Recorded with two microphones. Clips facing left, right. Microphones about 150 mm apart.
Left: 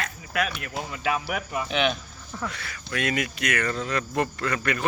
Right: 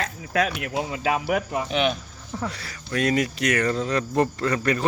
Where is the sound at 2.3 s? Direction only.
30° right (ahead or behind).